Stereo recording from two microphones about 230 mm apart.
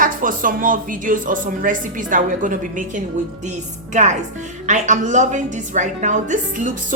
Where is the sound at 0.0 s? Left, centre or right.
Right.